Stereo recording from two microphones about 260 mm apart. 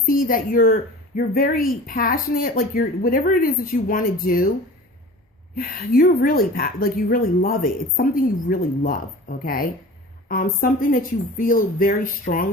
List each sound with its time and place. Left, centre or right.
0.1 s speech: left
5.5 s speech: left